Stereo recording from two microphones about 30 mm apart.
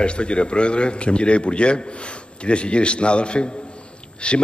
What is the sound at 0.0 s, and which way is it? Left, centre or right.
A man's voice, left.